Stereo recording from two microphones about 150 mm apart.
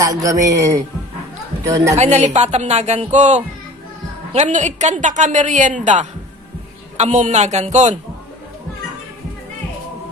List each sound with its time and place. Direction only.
0.0 s speech: 20° right (ahead or behind)
2.0 s a woman's voice: 45° right (ahead or behind)